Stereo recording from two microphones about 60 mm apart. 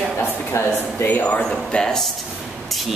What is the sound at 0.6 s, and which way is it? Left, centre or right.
Speech, left.